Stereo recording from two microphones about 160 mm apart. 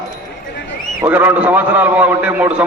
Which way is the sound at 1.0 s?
10° right (ahead or behind).